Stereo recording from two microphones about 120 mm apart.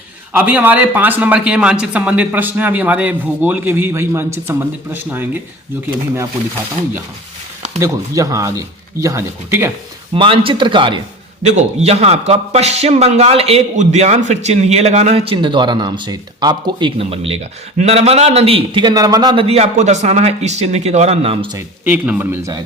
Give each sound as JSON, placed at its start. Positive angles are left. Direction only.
{"t": 0.3, "sound": "a man's voice", "side_deg": -15}
{"t": 7.8, "sound": "speech", "side_deg": -25}
{"t": 10.2, "sound": "a man's voice", "side_deg": -45}
{"t": 11.4, "sound": "a man's voice", "side_deg": -65}
{"t": 13.7, "sound": "a man's voice", "side_deg": -70}
{"t": 17.0, "sound": "a man's voice", "side_deg": -55}
{"t": 19.4, "sound": "a man's voice", "side_deg": -60}
{"t": 21.8, "sound": "a man's voice", "side_deg": -10}